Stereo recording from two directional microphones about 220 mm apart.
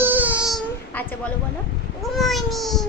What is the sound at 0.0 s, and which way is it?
Child singing, 10° right (ahead or behind).